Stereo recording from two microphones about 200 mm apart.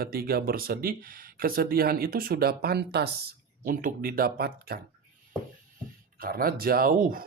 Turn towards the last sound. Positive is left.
turn(degrees=-45)  # may be behind; listen again after turning